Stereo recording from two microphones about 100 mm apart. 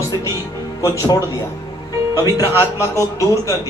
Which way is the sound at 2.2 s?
40° left (ahead or behind).